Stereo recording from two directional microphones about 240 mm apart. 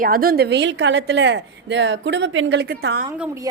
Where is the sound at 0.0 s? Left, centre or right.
Right.